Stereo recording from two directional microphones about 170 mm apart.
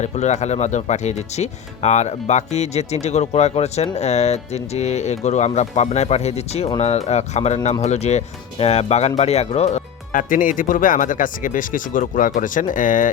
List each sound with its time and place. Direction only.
0.0 s speech: 40° left (ahead or behind)